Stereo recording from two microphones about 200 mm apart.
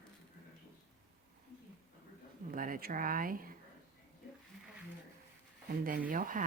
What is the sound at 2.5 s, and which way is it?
A woman's voice, 45° right (ahead or behind).